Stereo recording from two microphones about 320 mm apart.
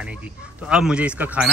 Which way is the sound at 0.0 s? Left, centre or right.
Centre.